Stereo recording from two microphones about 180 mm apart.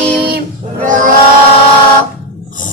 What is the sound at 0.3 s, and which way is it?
Music, 55° right (ahead or behind).